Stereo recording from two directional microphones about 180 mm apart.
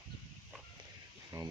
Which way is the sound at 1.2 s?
20° right (ahead or behind).